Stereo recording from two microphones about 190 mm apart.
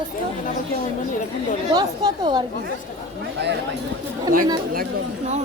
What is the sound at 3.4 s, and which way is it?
Speech, 65° right (ahead or behind).